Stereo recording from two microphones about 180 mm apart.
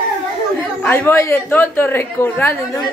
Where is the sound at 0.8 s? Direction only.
10° left (ahead or behind).